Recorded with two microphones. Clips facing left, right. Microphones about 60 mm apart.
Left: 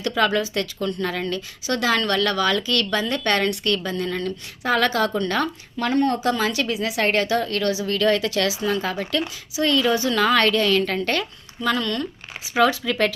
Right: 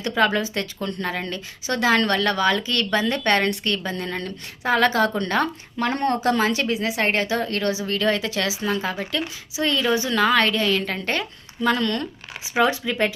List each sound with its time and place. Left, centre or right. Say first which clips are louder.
0.1 s speech: even; right
12.5 s speech: left 1 dB; right